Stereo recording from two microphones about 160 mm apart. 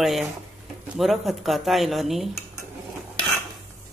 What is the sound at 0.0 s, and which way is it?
Speech, centre (ahead or behind).